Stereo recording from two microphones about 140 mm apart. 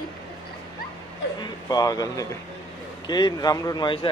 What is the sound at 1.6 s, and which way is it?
Speech, 25° left (ahead or behind).